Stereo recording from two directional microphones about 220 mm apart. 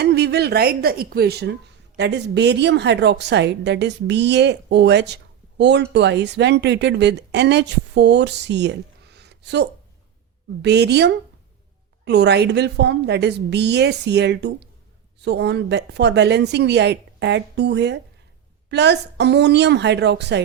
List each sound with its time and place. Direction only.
0.0 s a woman's voice: 45° right (ahead or behind)